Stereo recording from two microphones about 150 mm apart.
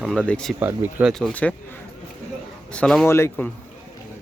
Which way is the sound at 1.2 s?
10° left (ahead or behind).